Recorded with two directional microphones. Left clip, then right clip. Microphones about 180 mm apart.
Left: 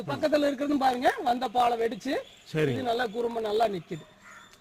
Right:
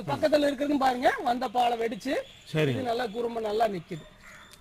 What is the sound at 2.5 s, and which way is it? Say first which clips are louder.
Speech: even; 65° right (ahead or behind).